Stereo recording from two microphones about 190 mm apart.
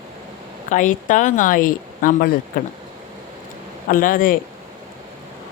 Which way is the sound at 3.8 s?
45° left (ahead or behind).